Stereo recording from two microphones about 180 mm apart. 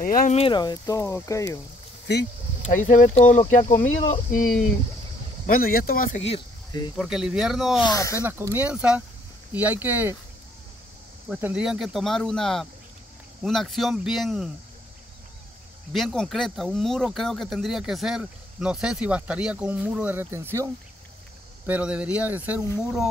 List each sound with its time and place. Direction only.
0.0 s speech: 50° left (ahead or behind)
0.3 s speech: 30° left (ahead or behind)
2.6 s speech: 45° left (ahead or behind)
5.5 s speech: 55° left (ahead or behind)
6.2 s speech: 25° left (ahead or behind)
7.0 s speech: centre (ahead or behind)
7.9 s speech: 15° left (ahead or behind)
8.2 s speech: 15° right (ahead or behind)
11.2 s speech: 5° right (ahead or behind)
15.9 s speech: centre (ahead or behind)